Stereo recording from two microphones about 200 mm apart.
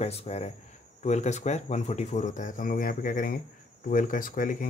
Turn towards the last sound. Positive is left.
turn(degrees=40)  # may be behind; listen again after turning